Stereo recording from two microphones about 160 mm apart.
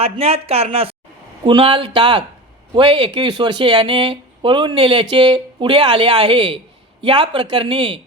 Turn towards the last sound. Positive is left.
turn(degrees=-35)  # may be behind; listen again after turning